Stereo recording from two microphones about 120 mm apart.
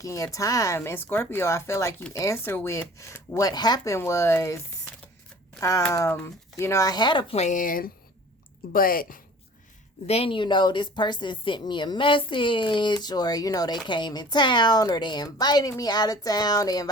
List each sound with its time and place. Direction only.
0.0 s speech: 30° left (ahead or behind)
3.9 s speech: 25° left (ahead or behind); by 7.3 s 40° left (ahead or behind)
7.3 s speech: 75° left (ahead or behind)
10.1 s speech: 60° left (ahead or behind)
10.3 s a woman's voice: 40° left (ahead or behind)